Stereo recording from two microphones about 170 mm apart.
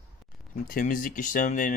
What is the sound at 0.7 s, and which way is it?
Speech, 55° left (ahead or behind).